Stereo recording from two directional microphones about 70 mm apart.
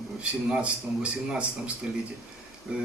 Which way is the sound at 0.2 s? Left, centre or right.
Centre.